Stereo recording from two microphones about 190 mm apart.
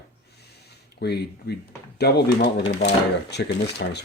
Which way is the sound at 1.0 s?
65° left (ahead or behind).